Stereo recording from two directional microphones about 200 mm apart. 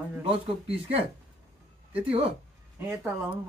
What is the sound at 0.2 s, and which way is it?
Speech, 30° right (ahead or behind).